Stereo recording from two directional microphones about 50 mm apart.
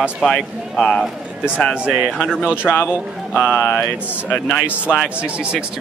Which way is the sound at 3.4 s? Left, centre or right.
Left.